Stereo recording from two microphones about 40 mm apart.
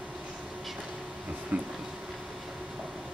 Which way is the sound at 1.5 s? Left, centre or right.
Right.